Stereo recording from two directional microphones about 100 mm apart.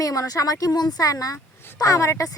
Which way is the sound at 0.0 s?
35° left (ahead or behind).